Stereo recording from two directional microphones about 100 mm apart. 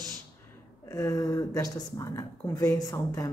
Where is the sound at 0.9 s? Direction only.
35° left (ahead or behind).